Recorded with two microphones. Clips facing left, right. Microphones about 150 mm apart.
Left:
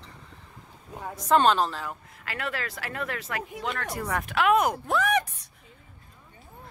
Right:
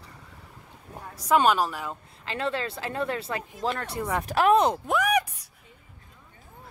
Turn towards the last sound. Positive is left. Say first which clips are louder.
# right 1 dB
turn(degrees=-10)  # may be behind; listen again after turning